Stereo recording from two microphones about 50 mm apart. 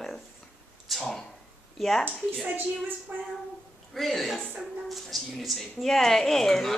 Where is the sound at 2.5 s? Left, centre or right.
Right.